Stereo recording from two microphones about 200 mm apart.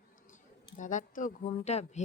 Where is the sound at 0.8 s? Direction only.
40° left (ahead or behind).